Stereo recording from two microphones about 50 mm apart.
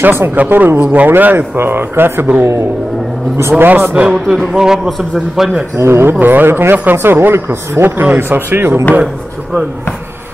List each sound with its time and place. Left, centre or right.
0.0 s speech: right
2.4 s a man's voice: right
3.5 s a man's voice: right
3.9 s a man's voice: centre
5.8 s a man's voice: right
6.2 s speech: right
7.3 s a man's voice: right